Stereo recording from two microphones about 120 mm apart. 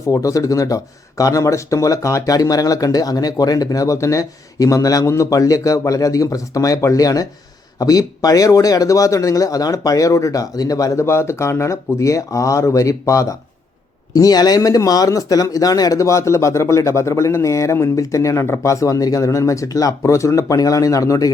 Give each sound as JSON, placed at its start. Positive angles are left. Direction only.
{"t": 0.1, "sound": "speech", "side_deg": 30}